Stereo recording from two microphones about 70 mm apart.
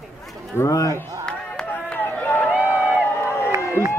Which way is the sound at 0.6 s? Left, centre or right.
Left.